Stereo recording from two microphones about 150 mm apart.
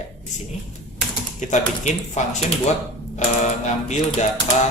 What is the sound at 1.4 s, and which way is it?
A man's voice, 50° left (ahead or behind).